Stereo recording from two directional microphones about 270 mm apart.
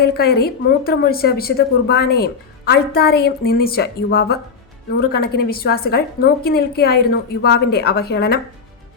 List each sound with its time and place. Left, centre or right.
0.0 s a woman's voice: left